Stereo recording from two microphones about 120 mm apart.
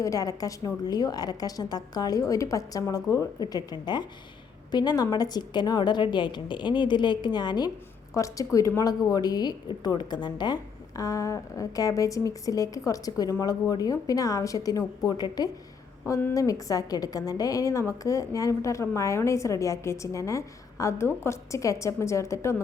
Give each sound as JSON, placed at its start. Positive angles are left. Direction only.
{"t": 0.0, "sound": "a woman's voice", "side_deg": 25}